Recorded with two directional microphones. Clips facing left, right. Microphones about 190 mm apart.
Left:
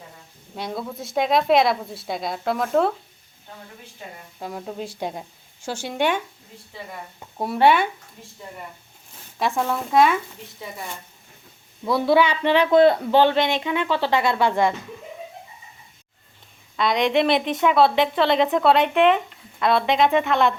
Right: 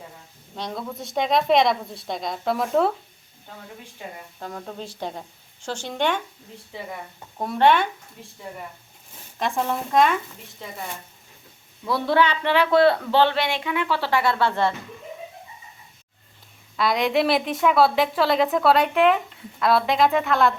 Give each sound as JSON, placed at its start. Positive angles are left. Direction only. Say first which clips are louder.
{"t": 0.5, "sound": "a woman's voice", "louder": "left 1 dB", "side_deg": 5}
{"t": 4.4, "sound": "a man's voice", "louder": "left 4 dB", "side_deg": 10}
{"t": 7.3, "sound": "a man's voice", "louder": "left 1 dB", "side_deg": 5}
{"t": 9.9, "sound": "a man's voice", "louder": "left 2 dB", "side_deg": 5}
{"t": 11.9, "sound": "a man's voice", "louder": "left 3 dB", "side_deg": 10}
{"t": 16.7, "sound": "a woman's voice", "louder": "left 1 dB", "side_deg": -5}